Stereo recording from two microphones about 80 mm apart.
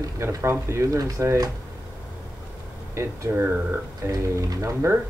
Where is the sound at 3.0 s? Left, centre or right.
Right.